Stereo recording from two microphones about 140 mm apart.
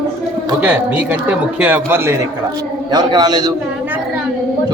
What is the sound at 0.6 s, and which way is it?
Speech, 10° right (ahead or behind).